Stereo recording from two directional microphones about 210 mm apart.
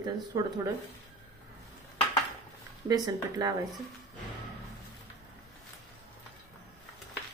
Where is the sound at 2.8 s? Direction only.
15° right (ahead or behind).